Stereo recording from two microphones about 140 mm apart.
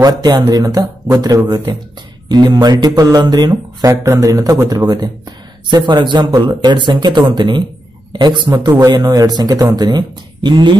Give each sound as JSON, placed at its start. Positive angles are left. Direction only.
{"t": 0.0, "sound": "speech", "side_deg": -30}